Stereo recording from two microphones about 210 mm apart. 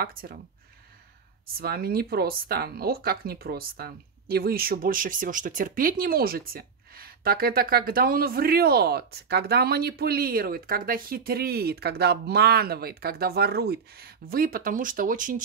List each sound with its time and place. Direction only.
0.0 s speech: 45° right (ahead or behind)
1.6 s speech: 45° right (ahead or behind)